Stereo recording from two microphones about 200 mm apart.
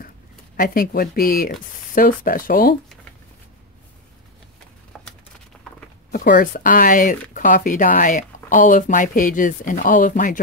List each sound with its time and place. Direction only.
0.6 s speech: 45° left (ahead or behind)
4.9 s a sound: centre (ahead or behind)
6.1 s speech: 45° left (ahead or behind)